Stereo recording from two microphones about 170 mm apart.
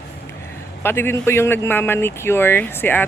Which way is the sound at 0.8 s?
15° left (ahead or behind).